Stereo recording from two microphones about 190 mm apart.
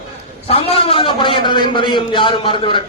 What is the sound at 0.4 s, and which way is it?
A man's voice, 30° left (ahead or behind).